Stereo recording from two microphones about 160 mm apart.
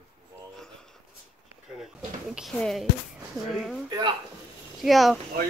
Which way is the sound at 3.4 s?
20° right (ahead or behind).